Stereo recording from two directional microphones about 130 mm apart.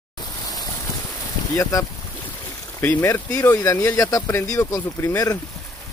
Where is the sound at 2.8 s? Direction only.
15° left (ahead or behind).